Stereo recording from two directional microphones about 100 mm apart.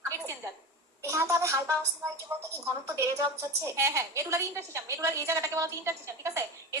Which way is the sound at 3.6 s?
30° right (ahead or behind).